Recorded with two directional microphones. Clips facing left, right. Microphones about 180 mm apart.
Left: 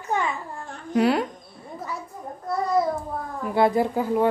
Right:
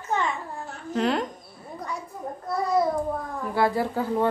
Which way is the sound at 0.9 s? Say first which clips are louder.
Left 4 dB; 10° left (ahead or behind).